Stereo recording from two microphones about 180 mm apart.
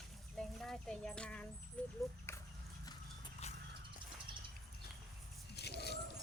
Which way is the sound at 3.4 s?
35° left (ahead or behind).